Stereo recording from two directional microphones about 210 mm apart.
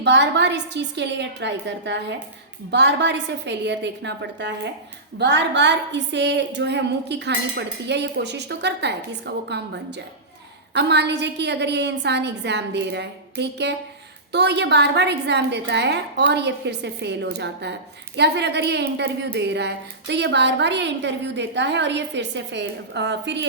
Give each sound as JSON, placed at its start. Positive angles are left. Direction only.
{"t": 0.0, "sound": "a woman's voice", "side_deg": -55}